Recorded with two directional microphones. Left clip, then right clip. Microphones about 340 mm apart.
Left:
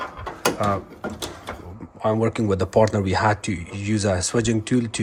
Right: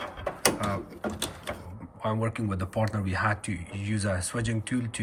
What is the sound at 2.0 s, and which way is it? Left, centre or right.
Speech, centre.